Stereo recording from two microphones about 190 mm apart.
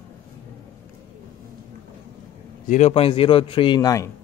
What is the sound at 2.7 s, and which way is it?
A man's voice, 35° left (ahead or behind).